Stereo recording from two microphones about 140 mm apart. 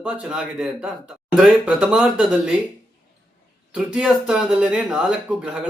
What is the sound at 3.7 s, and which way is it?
Speech, 5° right (ahead or behind).